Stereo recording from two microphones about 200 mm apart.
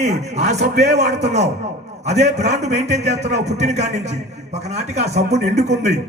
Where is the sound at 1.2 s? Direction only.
35° right (ahead or behind).